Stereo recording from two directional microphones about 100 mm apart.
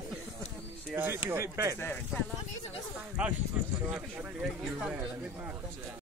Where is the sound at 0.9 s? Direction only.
20° right (ahead or behind).